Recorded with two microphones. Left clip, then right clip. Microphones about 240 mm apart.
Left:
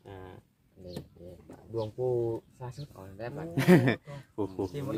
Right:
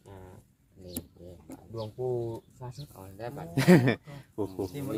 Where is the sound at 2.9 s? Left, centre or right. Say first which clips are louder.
Right 1 dB; centre.